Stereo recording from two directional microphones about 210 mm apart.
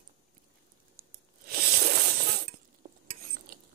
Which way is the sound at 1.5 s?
50° right (ahead or behind).